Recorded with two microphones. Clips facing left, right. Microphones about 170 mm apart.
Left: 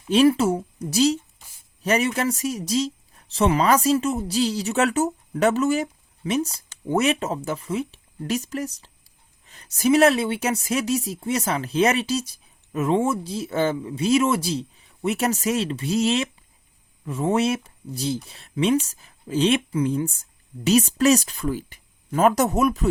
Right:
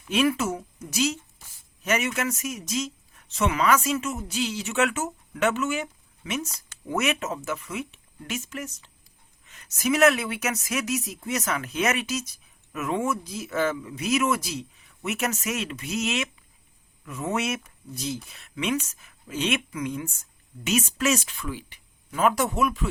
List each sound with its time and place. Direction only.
0.0 s speech: 30° left (ahead or behind)